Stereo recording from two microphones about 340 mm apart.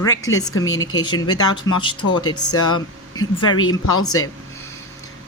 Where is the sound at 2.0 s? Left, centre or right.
Left.